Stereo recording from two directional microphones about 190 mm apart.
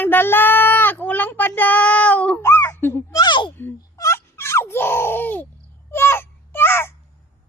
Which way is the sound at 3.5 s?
15° left (ahead or behind).